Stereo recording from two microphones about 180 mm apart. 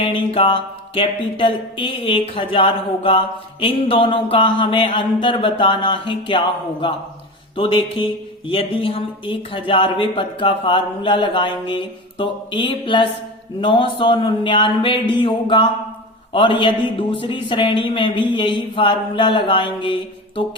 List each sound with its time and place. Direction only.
0.0 s a man's voice: 30° left (ahead or behind)
7.5 s a man's voice: 30° left (ahead or behind)